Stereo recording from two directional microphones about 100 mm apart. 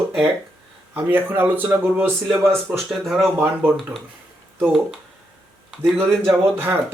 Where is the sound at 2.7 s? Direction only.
Centre (ahead or behind).